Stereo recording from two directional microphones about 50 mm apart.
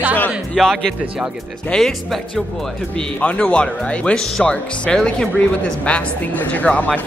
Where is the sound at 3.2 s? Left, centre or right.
Left.